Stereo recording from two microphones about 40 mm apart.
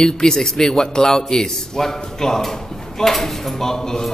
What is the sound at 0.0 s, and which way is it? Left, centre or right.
A man's voice, centre.